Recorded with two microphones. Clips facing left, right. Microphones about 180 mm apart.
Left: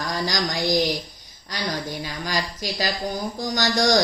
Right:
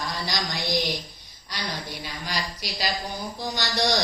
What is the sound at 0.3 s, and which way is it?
Speech, 45° left (ahead or behind).